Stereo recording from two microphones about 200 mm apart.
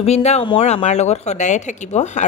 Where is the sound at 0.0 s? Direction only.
35° left (ahead or behind).